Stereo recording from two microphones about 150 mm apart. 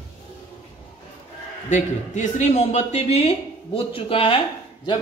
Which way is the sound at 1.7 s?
50° left (ahead or behind).